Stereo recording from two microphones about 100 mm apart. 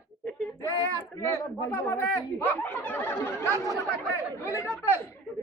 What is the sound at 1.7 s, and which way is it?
Speech, 20° left (ahead or behind).